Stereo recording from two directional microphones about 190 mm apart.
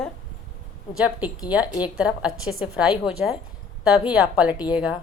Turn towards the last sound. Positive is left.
turn(degrees=-5)  # may be behind; listen again after turning